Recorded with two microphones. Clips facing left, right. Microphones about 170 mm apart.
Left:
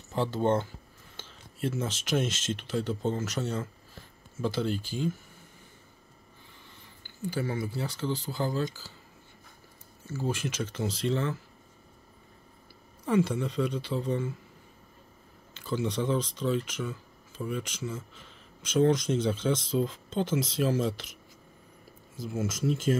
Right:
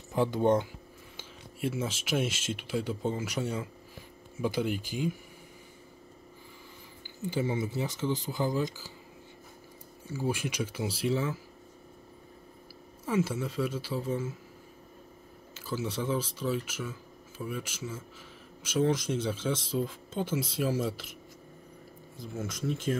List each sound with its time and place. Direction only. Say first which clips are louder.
0.1 s speech: right 1 dB; 15° right (ahead or behind)
7.2 s speech: right 1 dB; 20° right (ahead or behind)
10.0 s speech: even; 10° right (ahead or behind)
13.0 s speech: left 3 dB; 5° right (ahead or behind)
15.5 s speech: left 3 dB; 5° right (ahead or behind)
22.2 s speech: left 4 dB; 5° left (ahead or behind)